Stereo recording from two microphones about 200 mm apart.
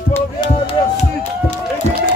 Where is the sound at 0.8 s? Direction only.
20° left (ahead or behind).